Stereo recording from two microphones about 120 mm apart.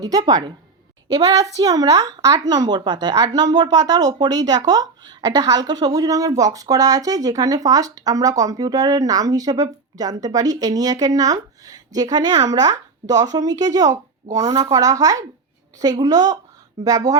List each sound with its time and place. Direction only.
0.0 s speech: 30° right (ahead or behind)